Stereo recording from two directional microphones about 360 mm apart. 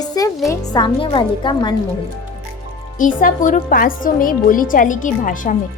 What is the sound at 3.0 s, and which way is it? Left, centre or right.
A woman's voice, left.